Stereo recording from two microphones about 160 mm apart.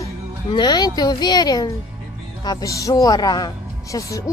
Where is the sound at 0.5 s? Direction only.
25° left (ahead or behind).